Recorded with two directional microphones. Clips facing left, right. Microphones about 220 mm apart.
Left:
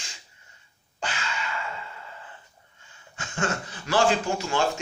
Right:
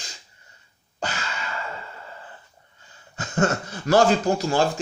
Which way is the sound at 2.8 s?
40° right (ahead or behind).